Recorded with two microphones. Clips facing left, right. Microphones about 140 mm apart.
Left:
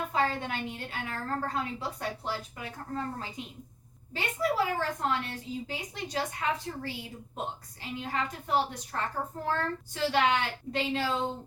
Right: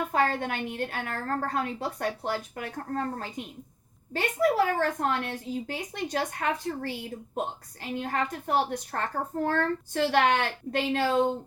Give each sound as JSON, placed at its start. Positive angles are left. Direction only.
{"t": 0.1, "sound": "a woman's voice", "side_deg": -55}